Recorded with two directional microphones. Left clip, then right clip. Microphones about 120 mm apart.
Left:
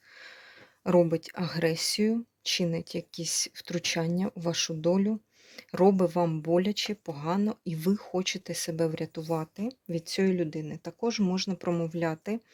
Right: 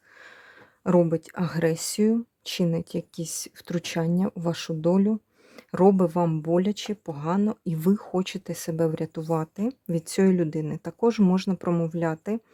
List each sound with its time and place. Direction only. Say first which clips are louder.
0.9 s speech: right 2 dB; 25° right (ahead or behind); by 11.7 s 45° right (ahead or behind)
11.7 s speech: right 3 dB; 30° right (ahead or behind)